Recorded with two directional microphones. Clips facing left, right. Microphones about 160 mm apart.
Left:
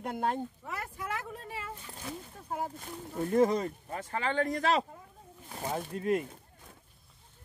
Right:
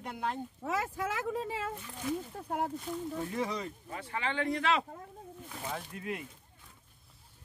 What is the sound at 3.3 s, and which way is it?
Speech, 45° left (ahead or behind).